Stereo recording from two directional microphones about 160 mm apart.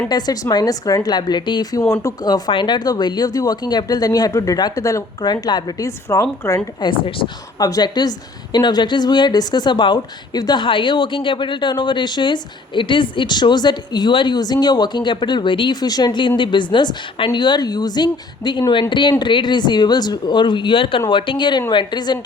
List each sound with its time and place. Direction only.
0.1 s a woman's voice: 25° left (ahead or behind)